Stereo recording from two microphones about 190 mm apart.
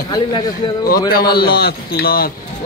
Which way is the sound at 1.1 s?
50° left (ahead or behind).